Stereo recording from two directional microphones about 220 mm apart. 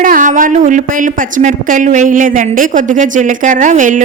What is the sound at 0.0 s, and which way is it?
A woman's voice, 40° right (ahead or behind).